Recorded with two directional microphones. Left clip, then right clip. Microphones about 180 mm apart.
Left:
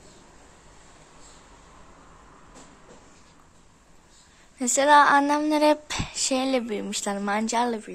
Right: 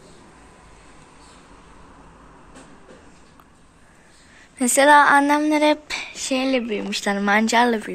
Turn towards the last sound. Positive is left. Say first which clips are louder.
# right 8 dB
turn(degrees=10)  # may be behind; listen again after turning